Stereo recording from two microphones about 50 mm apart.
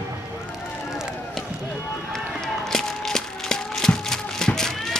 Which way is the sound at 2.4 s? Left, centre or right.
Centre.